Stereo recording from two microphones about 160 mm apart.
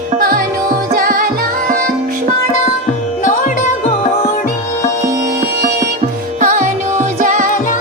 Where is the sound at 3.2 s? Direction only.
50° left (ahead or behind).